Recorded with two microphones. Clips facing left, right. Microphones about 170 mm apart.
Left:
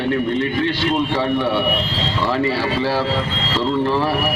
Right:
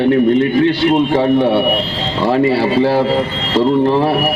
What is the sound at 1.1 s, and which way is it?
Speech, 45° right (ahead or behind).